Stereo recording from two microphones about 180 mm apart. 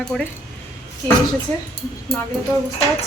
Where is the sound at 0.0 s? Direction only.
5° left (ahead or behind).